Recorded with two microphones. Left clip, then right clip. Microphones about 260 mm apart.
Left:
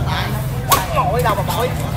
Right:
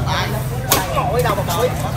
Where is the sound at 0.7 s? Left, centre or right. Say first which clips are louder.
Left 2 dB; left.